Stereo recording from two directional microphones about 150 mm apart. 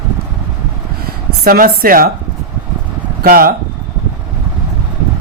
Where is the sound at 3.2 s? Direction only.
85° right.